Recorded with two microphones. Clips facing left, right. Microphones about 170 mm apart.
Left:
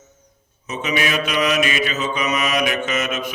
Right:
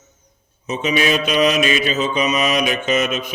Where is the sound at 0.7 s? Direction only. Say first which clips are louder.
Right 4 dB; 25° right (ahead or behind).